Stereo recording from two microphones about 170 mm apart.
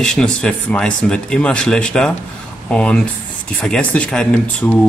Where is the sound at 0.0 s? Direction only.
5° left (ahead or behind).